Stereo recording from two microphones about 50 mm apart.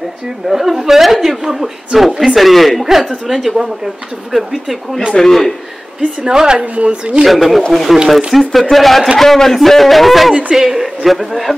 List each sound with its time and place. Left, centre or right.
0.5 s speech: centre
5.1 s a man's voice: centre
6.2 s a woman's voice: centre
7.2 s a woman's voice: centre